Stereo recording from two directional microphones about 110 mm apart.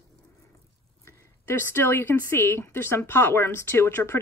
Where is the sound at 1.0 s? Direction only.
20° left (ahead or behind).